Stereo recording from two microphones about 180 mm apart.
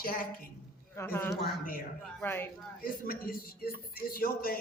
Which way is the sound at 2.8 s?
55° left (ahead or behind).